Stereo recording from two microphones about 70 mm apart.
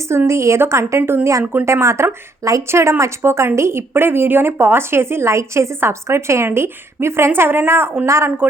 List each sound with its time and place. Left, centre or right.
0.3 s a woman's voice: right